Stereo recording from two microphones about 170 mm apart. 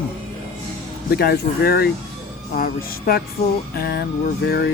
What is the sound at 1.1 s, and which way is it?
Music, 65° left (ahead or behind).